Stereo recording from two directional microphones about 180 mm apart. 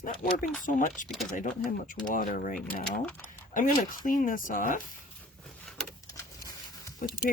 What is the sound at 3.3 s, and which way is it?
Speech, 50° left (ahead or behind).